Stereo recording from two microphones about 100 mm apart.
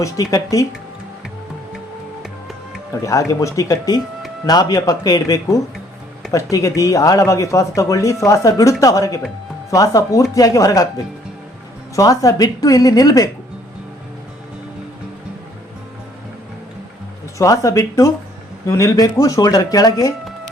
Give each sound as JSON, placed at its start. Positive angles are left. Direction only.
{"t": 0.0, "sound": "speech", "side_deg": 35}
{"t": 2.9, "sound": "speech", "side_deg": 35}
{"t": 17.3, "sound": "speech", "side_deg": 35}